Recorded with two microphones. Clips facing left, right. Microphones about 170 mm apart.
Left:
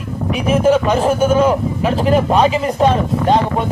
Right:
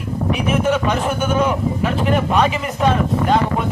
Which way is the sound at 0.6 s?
35° left (ahead or behind).